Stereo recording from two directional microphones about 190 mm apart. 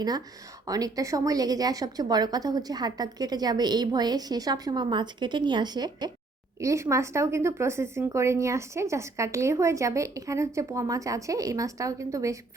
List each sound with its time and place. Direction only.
0.7 s a woman's voice: 20° right (ahead or behind)